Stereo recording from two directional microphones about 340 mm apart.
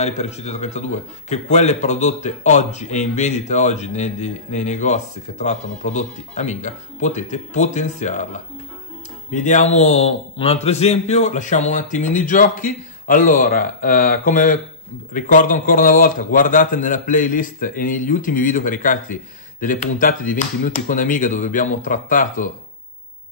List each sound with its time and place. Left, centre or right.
0.0 s speech: centre
9.3 s speech: left